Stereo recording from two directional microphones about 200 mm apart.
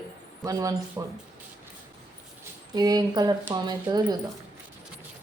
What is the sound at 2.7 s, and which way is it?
Speech, 20° right (ahead or behind).